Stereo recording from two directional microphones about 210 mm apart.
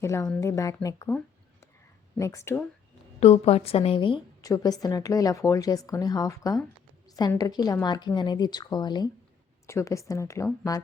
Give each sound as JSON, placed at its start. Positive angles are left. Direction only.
{"t": 0.0, "sound": "a woman's voice", "side_deg": 15}
{"t": 3.2, "sound": "a woman's voice", "side_deg": 30}